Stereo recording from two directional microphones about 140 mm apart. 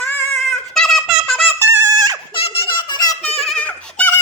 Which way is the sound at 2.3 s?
40° left (ahead or behind).